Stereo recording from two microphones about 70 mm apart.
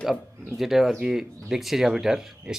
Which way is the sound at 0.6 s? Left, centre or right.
Centre.